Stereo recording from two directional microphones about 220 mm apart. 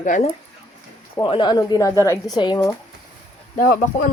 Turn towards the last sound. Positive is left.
turn(degrees=40)  # may be behind; listen again after turning